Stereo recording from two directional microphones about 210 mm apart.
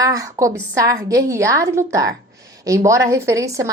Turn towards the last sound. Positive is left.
turn(degrees=-15)  # may be behind; listen again after turning